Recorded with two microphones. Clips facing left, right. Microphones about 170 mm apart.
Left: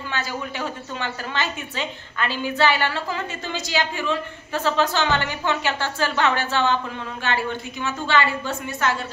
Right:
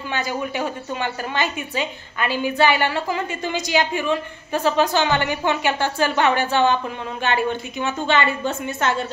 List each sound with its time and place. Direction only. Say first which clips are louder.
0.1 s a woman's voice: right 5 dB; 15° right (ahead or behind)